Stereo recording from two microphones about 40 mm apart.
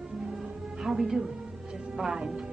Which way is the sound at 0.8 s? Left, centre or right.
Centre.